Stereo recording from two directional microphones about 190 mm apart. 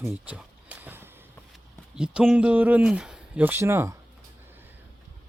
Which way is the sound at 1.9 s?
5° right (ahead or behind).